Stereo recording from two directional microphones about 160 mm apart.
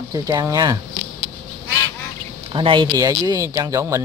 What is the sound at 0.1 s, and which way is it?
Speech, 20° right (ahead or behind).